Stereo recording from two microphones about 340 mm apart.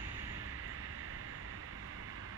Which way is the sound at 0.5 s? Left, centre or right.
Right.